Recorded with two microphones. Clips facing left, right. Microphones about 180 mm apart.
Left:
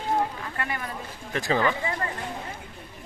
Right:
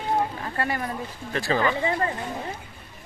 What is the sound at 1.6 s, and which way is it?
Speech, 25° right (ahead or behind).